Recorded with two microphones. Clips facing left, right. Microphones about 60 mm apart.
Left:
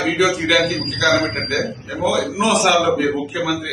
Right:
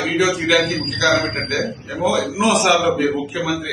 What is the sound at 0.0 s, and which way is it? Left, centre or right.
A man's voice, centre.